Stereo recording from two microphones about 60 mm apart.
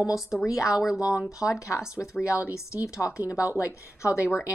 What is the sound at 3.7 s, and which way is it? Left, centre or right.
Speech, left.